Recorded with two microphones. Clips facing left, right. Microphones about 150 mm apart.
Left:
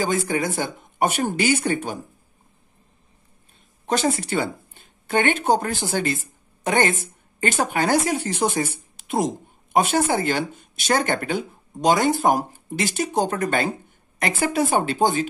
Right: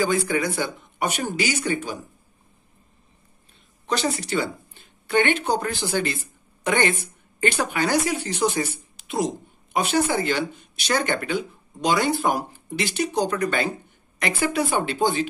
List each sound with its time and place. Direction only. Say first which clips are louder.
0.0 s speech: even; 45° left (ahead or behind)
3.8 s a woman's voice: left 3 dB; 45° left (ahead or behind)